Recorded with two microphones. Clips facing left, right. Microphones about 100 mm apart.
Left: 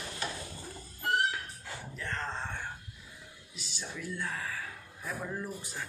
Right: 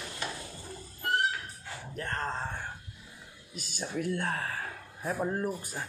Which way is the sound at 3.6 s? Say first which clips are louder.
Right 7 dB; 50° right (ahead or behind).